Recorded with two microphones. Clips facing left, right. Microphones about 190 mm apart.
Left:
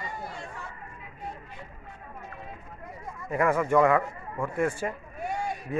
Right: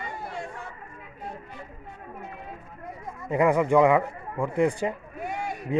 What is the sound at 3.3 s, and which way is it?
Speech, 15° right (ahead or behind).